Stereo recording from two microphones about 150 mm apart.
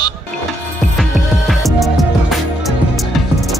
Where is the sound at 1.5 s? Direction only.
Centre (ahead or behind).